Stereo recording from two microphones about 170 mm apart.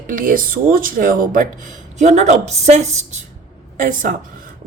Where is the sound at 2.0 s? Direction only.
40° right (ahead or behind).